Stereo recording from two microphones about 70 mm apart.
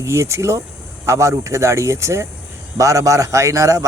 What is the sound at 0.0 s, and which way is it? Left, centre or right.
A man's voice, right.